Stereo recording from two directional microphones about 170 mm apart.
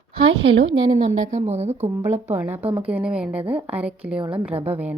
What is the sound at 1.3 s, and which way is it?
Speech, 40° right (ahead or behind).